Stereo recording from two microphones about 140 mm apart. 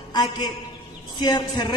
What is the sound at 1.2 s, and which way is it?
Speech, 30° left (ahead or behind).